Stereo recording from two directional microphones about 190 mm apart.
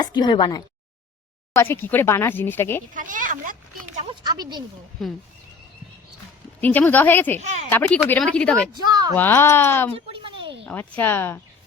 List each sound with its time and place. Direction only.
0.0 s speech: 25° left (ahead or behind)
1.5 s speech: 10° left (ahead or behind)
2.9 s a child's voice: 45° right (ahead or behind)
4.1 s speech: 20° right (ahead or behind)
5.0 s speech: centre (ahead or behind)
6.6 s speech: 10° left (ahead or behind)
7.3 s speech: 35° right (ahead or behind)
7.7 s speech: 10° left (ahead or behind)
8.7 s speech: 20° right (ahead or behind)
9.1 s speech: 10° left (ahead or behind)
9.9 s a sound: 25° right (ahead or behind)
10.7 s speech: 10° left (ahead or behind)